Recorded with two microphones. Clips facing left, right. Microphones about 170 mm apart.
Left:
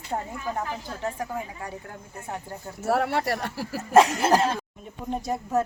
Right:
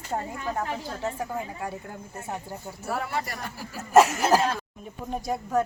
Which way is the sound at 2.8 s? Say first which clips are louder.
Left 7 dB; 70° left (ahead or behind).